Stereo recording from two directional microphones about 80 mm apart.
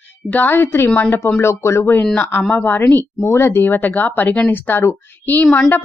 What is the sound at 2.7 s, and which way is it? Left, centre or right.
Speech, left.